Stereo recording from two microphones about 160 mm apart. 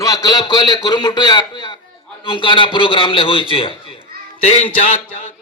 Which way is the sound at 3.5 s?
30° left (ahead or behind).